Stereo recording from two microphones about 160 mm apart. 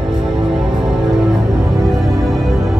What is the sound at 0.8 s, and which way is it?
Music, 5° right (ahead or behind).